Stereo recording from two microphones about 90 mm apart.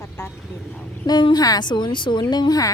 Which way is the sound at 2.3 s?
50° left (ahead or behind).